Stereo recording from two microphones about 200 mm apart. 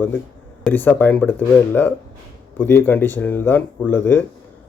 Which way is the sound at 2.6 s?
10° left (ahead or behind).